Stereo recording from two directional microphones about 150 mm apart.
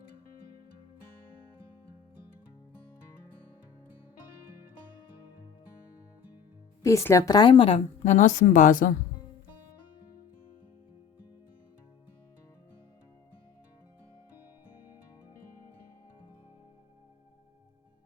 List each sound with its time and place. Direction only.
6.8 s a woman's voice: 20° left (ahead or behind); by 7.8 s 35° left (ahead or behind)
8.0 s a woman's voice: 55° left (ahead or behind)